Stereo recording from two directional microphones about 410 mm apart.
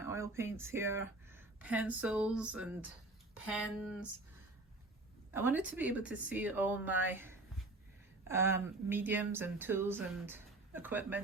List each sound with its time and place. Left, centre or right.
0.0 s speech: centre
5.3 s speech: centre